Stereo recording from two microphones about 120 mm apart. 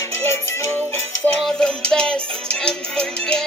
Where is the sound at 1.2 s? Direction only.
5° left (ahead or behind).